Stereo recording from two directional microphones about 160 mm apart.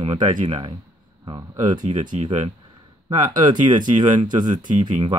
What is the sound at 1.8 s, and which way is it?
Speech, 50° right (ahead or behind).